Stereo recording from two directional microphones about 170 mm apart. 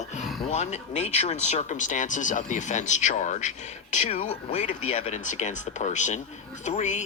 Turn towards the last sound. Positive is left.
turn(degrees=45)  # may be behind; listen again after turning